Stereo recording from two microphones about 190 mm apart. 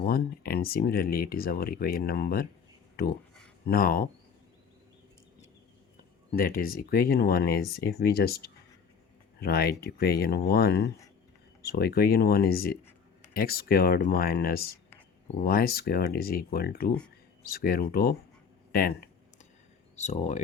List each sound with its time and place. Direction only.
0.0 s speech: 50° left (ahead or behind)
6.3 s speech: 50° left (ahead or behind)
20.0 s speech: 40° left (ahead or behind)